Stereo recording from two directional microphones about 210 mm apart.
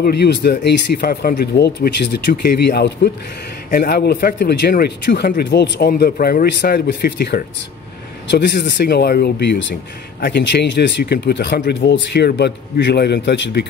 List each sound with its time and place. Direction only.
0.0 s speech: 50° left (ahead or behind)